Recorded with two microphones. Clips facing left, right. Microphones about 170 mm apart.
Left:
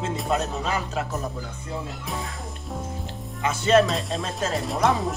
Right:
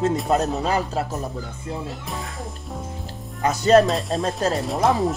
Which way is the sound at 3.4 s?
40° right (ahead or behind).